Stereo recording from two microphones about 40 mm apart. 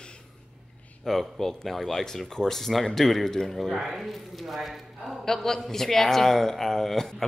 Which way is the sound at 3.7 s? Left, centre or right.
Centre.